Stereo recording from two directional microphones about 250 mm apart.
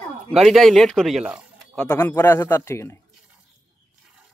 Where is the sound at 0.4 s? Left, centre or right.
Centre.